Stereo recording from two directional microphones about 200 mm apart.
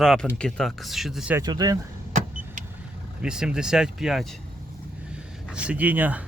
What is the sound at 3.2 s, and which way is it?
Speech, 5° right (ahead or behind).